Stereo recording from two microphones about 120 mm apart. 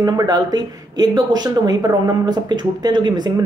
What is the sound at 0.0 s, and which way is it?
Speech, 35° right (ahead or behind).